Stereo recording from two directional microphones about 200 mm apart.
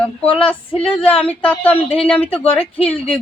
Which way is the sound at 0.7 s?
25° left (ahead or behind).